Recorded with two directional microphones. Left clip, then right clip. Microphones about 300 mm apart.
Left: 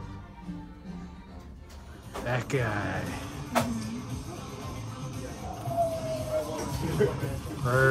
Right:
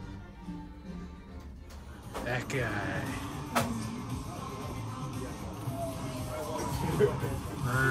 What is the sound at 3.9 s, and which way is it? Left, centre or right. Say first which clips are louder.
Music: even; right.